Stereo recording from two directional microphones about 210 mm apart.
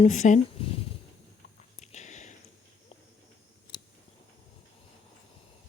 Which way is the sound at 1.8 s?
35° left (ahead or behind).